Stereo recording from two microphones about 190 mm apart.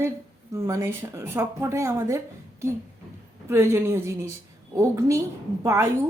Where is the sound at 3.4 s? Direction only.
15° right (ahead or behind).